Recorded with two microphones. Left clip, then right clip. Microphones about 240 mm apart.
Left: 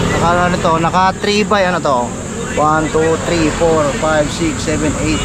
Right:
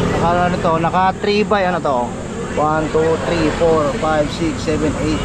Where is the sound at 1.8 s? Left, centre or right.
Right.